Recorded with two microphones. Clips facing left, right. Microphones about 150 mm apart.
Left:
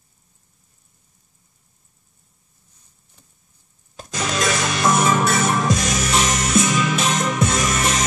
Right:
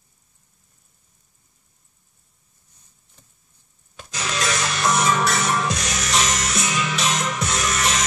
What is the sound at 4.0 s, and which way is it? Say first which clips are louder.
Music: left 4 dB; 45° left (ahead or behind).